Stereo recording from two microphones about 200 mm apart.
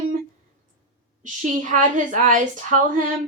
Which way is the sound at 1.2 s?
40° right (ahead or behind).